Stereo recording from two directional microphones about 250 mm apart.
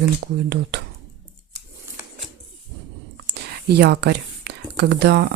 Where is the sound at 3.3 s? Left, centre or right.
Right.